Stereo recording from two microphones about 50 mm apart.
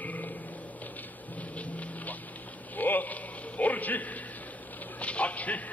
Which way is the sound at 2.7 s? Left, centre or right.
Left.